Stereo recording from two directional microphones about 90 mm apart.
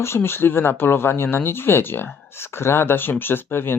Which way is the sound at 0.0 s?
25° left (ahead or behind).